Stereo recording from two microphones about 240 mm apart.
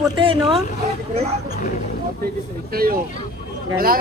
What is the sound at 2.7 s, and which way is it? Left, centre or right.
Speech, right.